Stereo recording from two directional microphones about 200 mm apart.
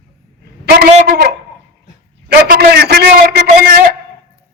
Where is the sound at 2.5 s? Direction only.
50° right (ahead or behind).